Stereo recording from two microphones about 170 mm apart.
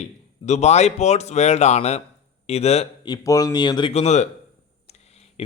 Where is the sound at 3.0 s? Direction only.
20° left (ahead or behind).